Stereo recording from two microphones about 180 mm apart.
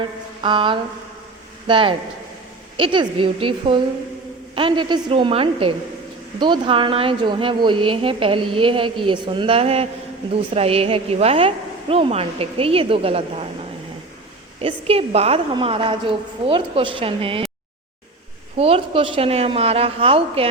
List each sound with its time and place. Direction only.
0.4 s a woman's voice: 25° right (ahead or behind)
14.6 s a woman's voice: 35° right (ahead or behind)
18.5 s a woman's voice: 30° right (ahead or behind)